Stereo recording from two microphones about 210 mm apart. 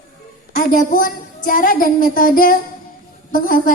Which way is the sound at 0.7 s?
40° left (ahead or behind).